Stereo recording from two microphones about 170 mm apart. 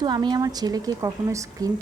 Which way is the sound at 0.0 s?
25° right (ahead or behind).